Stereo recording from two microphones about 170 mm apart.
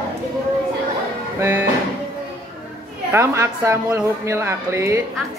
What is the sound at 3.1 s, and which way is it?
Speech, 15° right (ahead or behind).